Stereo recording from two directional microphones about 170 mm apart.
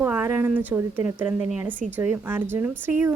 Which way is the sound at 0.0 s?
10° right (ahead or behind).